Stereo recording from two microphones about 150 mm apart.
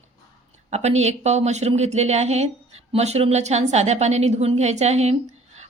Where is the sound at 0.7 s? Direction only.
45° right (ahead or behind).